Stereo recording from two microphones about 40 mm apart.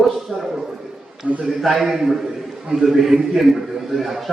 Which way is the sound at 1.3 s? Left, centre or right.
Right.